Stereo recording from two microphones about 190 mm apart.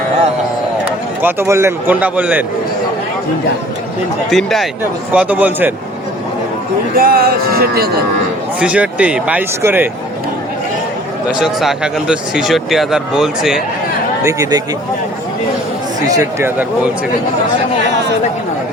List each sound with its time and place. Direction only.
0.9 s speech: 10° right (ahead or behind)
4.3 s speech: centre (ahead or behind)
6.9 s speech: 50° right (ahead or behind)
8.6 s speech: 5° right (ahead or behind)
11.3 s speech: centre (ahead or behind)
14.3 s speech: 15° right (ahead or behind)
16.0 s speech: 20° right (ahead or behind)